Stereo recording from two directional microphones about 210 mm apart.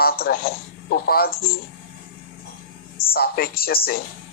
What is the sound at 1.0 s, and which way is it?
Speech, 45° left (ahead or behind).